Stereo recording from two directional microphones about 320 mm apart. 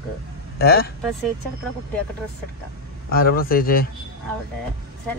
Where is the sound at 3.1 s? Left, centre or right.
Left.